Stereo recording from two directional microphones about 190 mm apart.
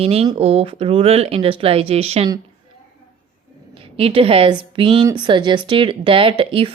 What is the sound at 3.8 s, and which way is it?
A woman's voice, 30° right (ahead or behind).